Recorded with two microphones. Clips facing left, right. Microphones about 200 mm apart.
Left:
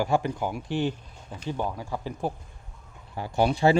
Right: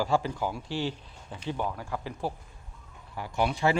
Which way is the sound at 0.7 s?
55° left (ahead or behind).